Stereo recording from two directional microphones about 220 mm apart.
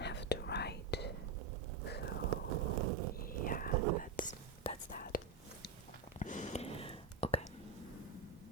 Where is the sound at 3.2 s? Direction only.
40° left (ahead or behind).